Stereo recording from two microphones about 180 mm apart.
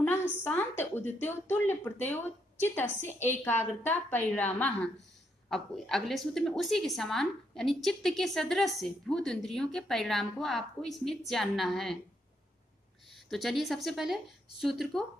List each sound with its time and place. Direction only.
0.4 s a woman's voice: 10° left (ahead or behind)
2.8 s a woman's voice: 40° left (ahead or behind)
3.4 s a woman's voice: 10° left (ahead or behind)
5.5 s a woman's voice: centre (ahead or behind)
13.1 s a woman's voice: centre (ahead or behind)